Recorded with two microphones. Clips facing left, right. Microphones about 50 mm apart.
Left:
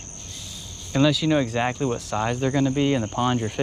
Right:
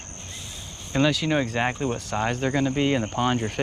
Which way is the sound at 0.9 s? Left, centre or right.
Centre.